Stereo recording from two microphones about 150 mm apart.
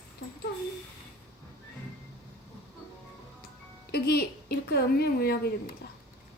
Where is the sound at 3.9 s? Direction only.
90° left.